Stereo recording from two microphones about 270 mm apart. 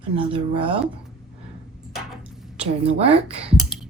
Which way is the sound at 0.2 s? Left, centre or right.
Centre.